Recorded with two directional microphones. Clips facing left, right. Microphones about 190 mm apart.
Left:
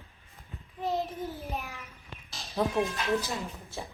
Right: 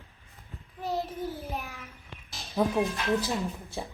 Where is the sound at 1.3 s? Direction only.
Centre (ahead or behind).